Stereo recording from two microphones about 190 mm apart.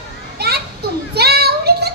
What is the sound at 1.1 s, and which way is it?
Child singing, 55° right (ahead or behind).